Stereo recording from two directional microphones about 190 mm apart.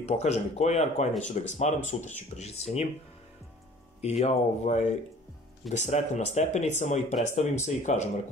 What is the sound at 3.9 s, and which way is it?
Speech, 35° left (ahead or behind).